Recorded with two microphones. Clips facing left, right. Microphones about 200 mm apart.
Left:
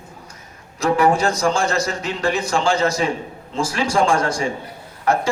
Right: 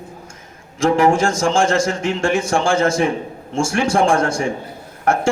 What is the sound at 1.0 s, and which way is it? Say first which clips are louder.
A man's voice: even; 50° right (ahead or behind).